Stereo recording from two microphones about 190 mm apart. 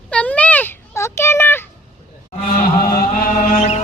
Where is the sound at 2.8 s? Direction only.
50° left (ahead or behind).